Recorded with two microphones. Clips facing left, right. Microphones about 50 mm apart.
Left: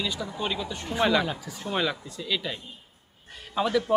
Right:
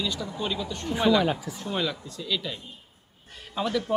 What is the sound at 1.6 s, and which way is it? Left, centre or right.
A man's voice, centre.